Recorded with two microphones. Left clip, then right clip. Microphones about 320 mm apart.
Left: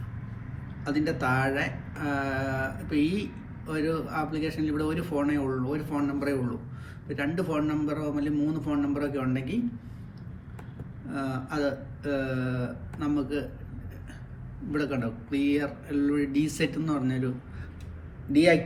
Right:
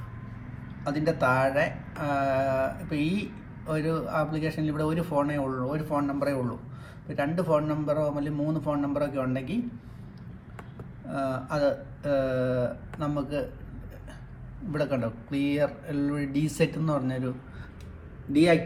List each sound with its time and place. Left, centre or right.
0.9 s speech: centre
11.1 s speech: centre
14.8 s speech: centre